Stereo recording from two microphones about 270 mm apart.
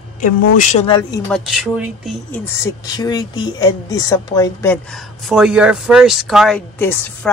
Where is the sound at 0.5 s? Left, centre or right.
Left.